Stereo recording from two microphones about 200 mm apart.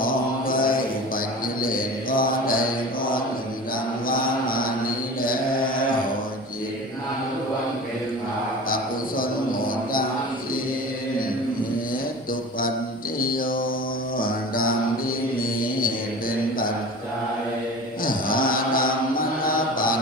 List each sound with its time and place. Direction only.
0.0 s mantra: 45° left (ahead or behind)
4.0 s music: 45° left (ahead or behind)
8.7 s a sound: 45° left (ahead or behind)
13.1 s mantra: 45° left (ahead or behind)
18.0 s mantra: 45° left (ahead or behind)